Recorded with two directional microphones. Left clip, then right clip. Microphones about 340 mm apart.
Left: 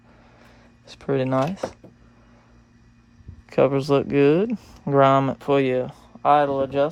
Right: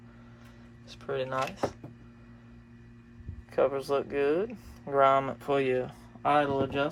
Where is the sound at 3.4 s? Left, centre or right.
Left.